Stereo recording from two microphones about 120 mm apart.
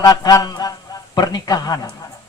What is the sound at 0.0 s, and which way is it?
A man's voice, 30° left (ahead or behind).